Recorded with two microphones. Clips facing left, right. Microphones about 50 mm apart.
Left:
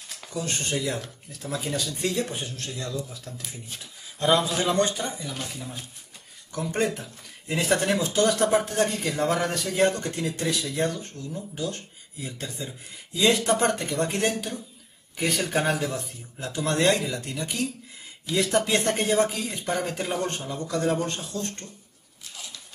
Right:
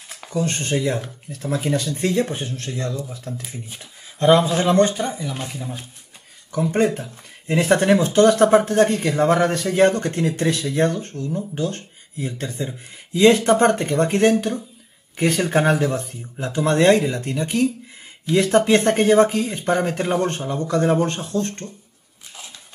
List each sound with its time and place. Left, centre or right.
0.3 s speech: right
5.0 s speech: centre
7.4 s speech: right
9.8 s speech: right
15.3 s speech: right